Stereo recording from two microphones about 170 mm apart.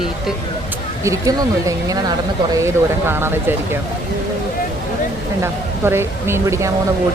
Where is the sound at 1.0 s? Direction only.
20° right (ahead or behind).